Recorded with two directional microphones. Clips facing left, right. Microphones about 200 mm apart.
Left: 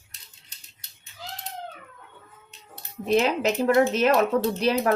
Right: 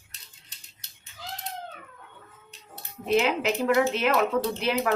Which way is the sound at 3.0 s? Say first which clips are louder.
Left 2 dB; 40° left (ahead or behind).